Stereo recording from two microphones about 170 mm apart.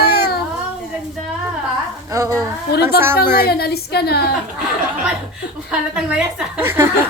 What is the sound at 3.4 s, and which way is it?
Speech, 70° left (ahead or behind).